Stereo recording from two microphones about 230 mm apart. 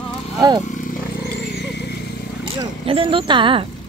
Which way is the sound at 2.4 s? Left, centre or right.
Right.